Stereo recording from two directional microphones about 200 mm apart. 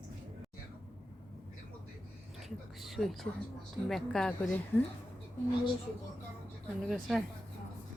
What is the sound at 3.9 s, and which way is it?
Speech, centre (ahead or behind).